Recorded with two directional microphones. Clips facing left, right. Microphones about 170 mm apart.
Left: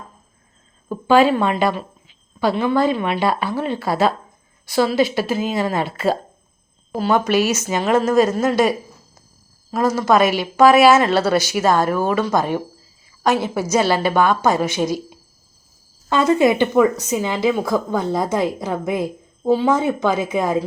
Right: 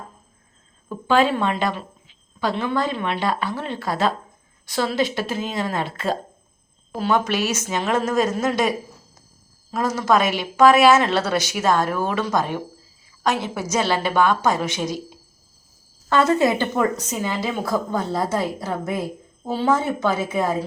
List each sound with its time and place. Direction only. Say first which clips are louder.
1.0 s a woman's voice: left 4 dB; 10° left (ahead or behind)
9.7 s a woman's voice: left 4 dB; 5° left (ahead or behind)
16.0 s a woman's voice: left 3 dB; 15° left (ahead or behind)